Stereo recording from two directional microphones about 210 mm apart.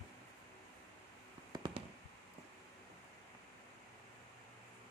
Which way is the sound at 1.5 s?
20° right (ahead or behind).